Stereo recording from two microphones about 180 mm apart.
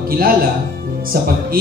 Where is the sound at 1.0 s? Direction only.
55° right (ahead or behind).